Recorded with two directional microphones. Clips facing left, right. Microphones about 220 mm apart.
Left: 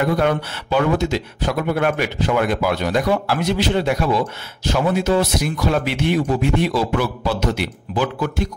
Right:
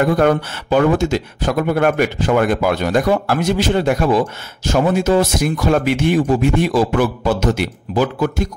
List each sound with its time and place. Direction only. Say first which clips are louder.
0.0 s speech: right 4 dB; 45° right (ahead or behind)